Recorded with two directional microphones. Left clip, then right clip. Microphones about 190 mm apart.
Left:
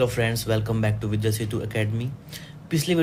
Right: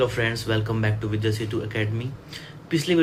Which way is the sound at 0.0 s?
40° left (ahead or behind).